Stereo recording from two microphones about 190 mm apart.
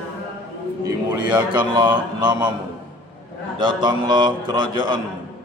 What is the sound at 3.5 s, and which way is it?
Speech, 25° right (ahead or behind).